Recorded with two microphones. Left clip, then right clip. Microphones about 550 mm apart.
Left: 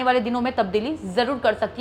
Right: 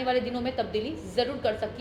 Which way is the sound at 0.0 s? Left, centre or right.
Left.